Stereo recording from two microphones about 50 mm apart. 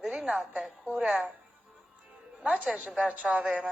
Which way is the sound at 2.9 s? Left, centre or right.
Right.